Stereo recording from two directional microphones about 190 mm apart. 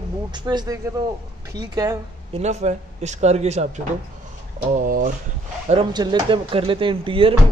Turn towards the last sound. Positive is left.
turn(degrees=-30)  # may be behind; listen again after turning